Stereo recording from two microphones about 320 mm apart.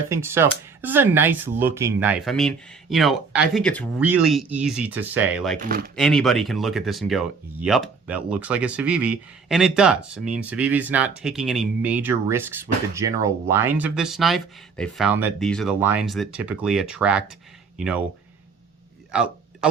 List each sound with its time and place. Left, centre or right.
0.1 s speech: centre
5.5 s speech: right
6.0 s speech: centre